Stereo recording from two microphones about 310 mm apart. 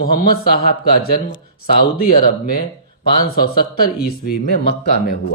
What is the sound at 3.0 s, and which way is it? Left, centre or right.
Speech, left.